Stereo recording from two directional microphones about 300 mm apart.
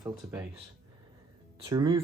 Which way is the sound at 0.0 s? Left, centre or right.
Centre.